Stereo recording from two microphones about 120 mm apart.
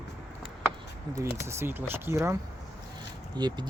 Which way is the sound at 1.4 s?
20° right (ahead or behind).